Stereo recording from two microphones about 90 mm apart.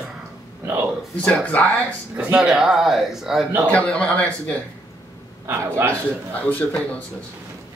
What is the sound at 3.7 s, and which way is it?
Speech, 15° left (ahead or behind).